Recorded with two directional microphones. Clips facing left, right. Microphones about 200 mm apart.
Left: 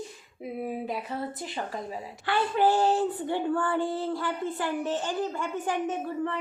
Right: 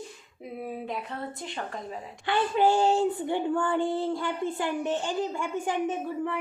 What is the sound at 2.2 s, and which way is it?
Speech, 20° right (ahead or behind).